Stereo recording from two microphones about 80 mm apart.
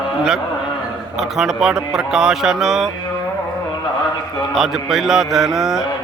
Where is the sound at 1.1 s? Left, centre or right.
Centre.